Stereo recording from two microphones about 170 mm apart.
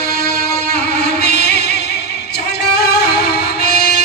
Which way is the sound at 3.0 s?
70° left (ahead or behind).